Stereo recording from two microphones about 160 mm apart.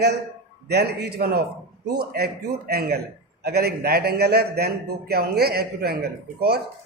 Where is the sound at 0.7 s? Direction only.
90° right.